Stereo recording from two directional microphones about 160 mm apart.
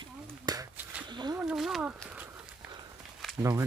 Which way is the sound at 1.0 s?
25° right (ahead or behind).